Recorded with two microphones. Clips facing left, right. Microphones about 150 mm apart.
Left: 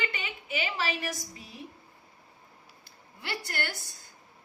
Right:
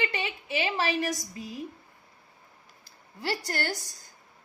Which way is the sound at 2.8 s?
40° right (ahead or behind).